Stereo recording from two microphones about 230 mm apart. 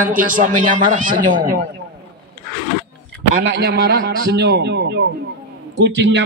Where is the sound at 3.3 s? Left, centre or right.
Right.